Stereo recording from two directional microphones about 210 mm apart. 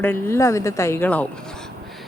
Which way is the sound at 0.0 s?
10° left (ahead or behind).